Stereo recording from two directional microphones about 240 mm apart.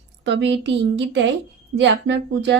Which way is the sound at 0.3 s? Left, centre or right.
Right.